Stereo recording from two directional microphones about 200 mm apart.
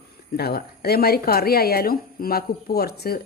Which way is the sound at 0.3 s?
50° left (ahead or behind).